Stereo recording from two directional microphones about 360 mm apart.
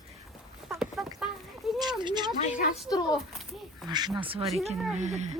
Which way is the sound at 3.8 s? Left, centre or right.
Centre.